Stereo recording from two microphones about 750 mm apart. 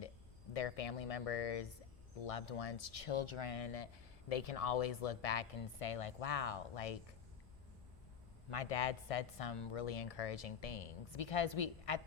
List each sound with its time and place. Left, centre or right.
0.5 s speech: left
8.4 s speech: left